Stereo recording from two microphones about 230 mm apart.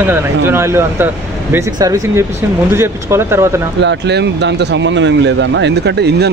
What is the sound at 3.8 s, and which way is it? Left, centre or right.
Speech, right.